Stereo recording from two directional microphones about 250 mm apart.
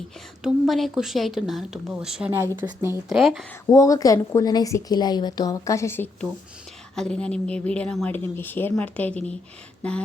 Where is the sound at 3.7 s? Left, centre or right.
Centre.